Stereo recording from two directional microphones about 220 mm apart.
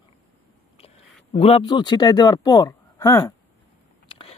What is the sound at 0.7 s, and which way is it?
Speech, 25° left (ahead or behind).